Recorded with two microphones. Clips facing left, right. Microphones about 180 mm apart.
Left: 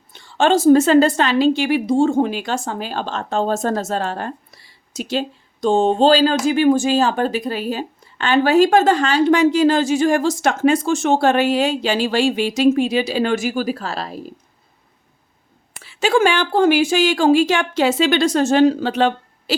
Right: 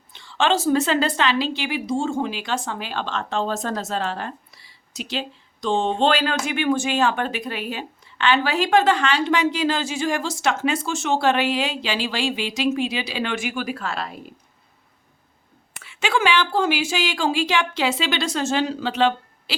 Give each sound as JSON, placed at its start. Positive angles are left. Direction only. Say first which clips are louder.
{"t": 0.1, "sound": "speech", "louder": "left 5 dB", "side_deg": 45}
{"t": 5.6, "sound": "speech", "louder": "left 6 dB", "side_deg": 40}
{"t": 15.7, "sound": "speech", "louder": "left 6 dB", "side_deg": 35}